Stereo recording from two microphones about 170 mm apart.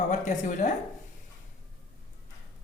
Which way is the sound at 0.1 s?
45° left (ahead or behind).